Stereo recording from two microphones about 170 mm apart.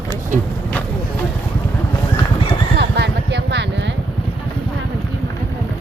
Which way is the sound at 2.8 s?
80° right.